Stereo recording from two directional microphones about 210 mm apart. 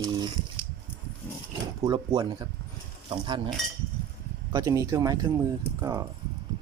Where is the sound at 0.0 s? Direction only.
20° right (ahead or behind).